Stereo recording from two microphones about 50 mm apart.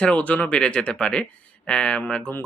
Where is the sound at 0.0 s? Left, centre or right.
Left.